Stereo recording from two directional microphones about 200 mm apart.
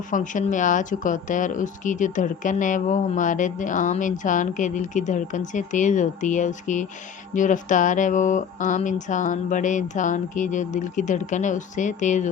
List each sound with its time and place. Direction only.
0.1 s speech: 40° left (ahead or behind)